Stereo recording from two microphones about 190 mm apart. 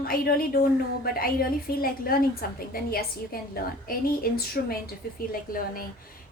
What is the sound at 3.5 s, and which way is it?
A woman's voice, 50° left (ahead or behind).